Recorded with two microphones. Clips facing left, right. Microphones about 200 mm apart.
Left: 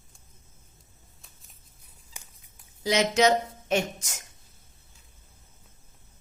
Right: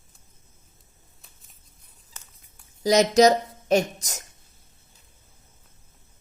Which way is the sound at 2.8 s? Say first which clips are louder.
Right 5 dB; 40° right (ahead or behind).